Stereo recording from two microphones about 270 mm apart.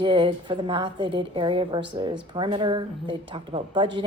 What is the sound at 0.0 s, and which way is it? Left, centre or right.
A woman's voice, centre.